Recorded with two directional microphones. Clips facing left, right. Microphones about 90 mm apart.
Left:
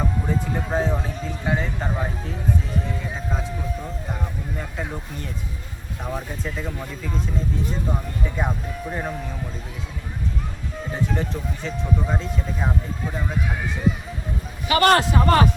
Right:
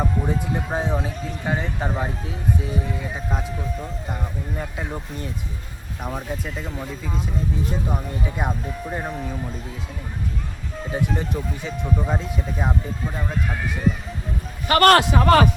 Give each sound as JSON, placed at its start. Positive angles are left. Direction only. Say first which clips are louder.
{"t": 0.0, "sound": "speech", "louder": "right 1 dB", "side_deg": -15}
{"t": 6.1, "sound": "speech", "louder": "even", "side_deg": -5}
{"t": 8.4, "sound": "speech", "louder": "left 1 dB", "side_deg": -10}
{"t": 10.9, "sound": "speech", "louder": "right 1 dB", "side_deg": -10}
{"t": 14.7, "sound": "a man's voice", "louder": "right 2 dB", "side_deg": -60}